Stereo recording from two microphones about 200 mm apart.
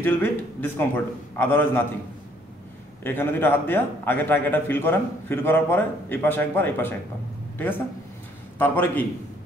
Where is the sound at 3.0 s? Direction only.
10° left (ahead or behind).